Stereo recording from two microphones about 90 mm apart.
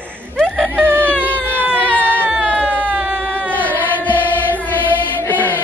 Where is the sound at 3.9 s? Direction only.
20° left (ahead or behind).